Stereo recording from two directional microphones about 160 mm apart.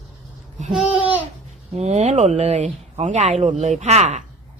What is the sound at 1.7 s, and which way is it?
A woman's voice, 45° right (ahead or behind).